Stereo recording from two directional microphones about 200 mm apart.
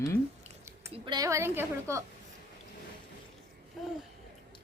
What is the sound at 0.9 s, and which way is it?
A woman's voice, 20° right (ahead or behind).